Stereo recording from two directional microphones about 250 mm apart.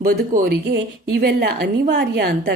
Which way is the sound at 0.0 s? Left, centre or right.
Right.